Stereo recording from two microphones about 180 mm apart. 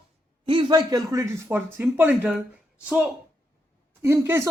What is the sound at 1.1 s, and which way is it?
Speech, 15° right (ahead or behind).